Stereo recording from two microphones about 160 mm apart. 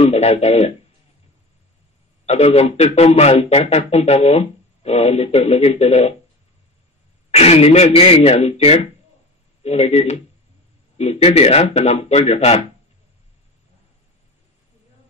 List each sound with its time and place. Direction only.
0.0 s speech: 40° left (ahead or behind)
2.2 s speech: 40° left (ahead or behind)
7.2 s speech: 40° left (ahead or behind)